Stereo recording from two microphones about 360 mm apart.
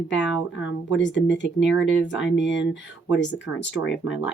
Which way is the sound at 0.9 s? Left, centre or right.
Left.